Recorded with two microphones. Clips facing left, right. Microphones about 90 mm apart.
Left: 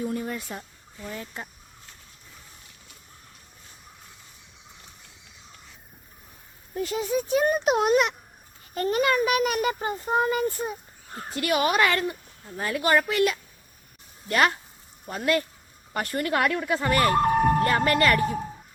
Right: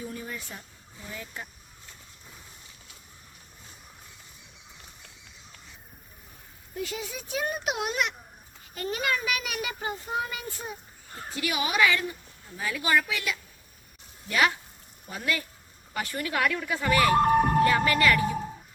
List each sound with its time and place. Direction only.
0.0 s a sound: 45° left (ahead or behind)
1.1 s speech: 35° left (ahead or behind)
6.7 s a child's voice: 40° left (ahead or behind)
15.0 s a child's voice: 50° left (ahead or behind)